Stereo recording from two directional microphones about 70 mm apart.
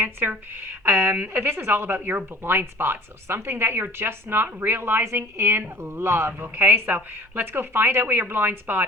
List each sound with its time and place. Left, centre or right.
0.0 s speech: right